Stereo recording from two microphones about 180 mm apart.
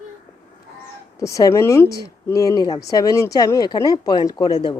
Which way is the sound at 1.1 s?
15° left (ahead or behind).